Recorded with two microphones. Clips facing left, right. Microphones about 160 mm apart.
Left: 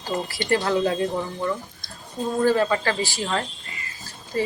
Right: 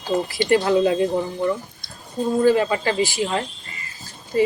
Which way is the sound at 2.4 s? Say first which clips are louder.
Right 2 dB; 15° right (ahead or behind).